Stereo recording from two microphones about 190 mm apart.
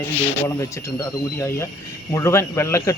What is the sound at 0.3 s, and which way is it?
Speech, 15° left (ahead or behind).